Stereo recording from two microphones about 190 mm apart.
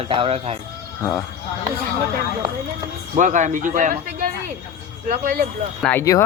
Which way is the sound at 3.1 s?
40° right (ahead or behind).